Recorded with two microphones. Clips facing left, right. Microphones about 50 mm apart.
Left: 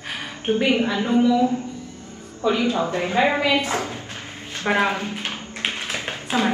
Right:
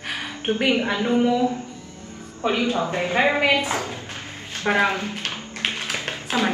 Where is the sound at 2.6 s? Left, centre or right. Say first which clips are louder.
Right 1 dB; left.